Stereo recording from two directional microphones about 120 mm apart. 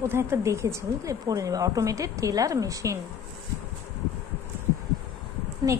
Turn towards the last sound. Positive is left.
turn(degrees=-30)  # may be behind; listen again after turning